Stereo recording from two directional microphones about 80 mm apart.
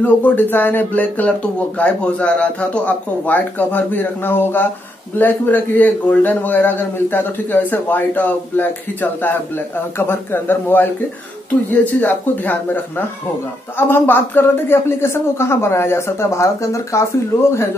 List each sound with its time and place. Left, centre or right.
0.0 s speech: left